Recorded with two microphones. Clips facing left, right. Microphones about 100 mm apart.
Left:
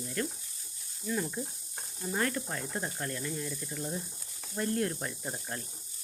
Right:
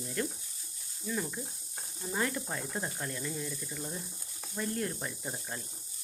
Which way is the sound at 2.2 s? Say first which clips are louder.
Left 1 dB; 10° right (ahead or behind).